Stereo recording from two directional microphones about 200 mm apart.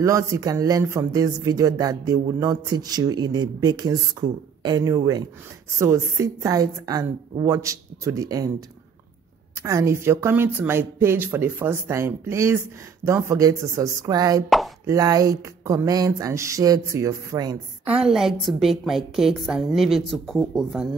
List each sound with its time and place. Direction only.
0.0 s speech: 15° right (ahead or behind)
17.8 s a woman's voice: 5° right (ahead or behind)